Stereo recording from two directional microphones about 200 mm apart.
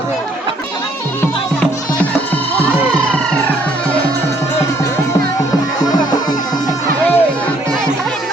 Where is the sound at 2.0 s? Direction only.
10° left (ahead or behind).